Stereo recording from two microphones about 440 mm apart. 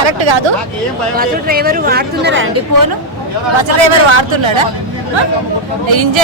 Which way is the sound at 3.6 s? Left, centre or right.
Right.